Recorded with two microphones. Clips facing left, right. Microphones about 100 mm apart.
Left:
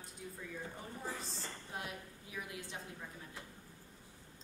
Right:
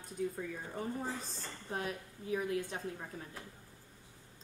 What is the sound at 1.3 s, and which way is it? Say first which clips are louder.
A woman's voice: right 4 dB; 40° right (ahead or behind).